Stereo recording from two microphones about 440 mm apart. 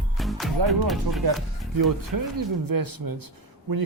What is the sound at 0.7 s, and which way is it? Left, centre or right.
Speech, centre.